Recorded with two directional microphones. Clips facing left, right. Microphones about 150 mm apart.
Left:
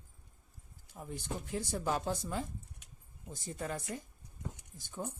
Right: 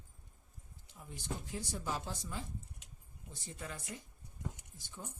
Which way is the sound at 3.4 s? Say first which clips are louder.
Left 7 dB; 45° left (ahead or behind).